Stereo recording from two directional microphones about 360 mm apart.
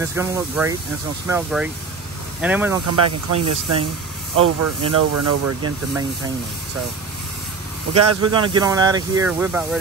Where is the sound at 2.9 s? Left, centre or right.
Right.